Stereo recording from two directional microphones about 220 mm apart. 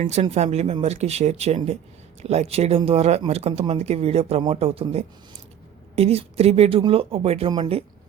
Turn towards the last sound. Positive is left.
turn(degrees=-20)  # may be behind; listen again after turning